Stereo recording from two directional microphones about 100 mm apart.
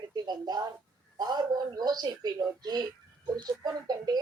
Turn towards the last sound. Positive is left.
turn(degrees=-40)  # may be behind; listen again after turning